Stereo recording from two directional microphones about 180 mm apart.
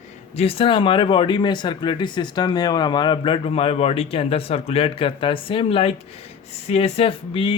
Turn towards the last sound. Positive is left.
turn(degrees=30)  # may be behind; listen again after turning